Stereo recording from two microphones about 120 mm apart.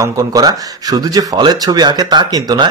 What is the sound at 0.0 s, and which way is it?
Speech, 30° right (ahead or behind).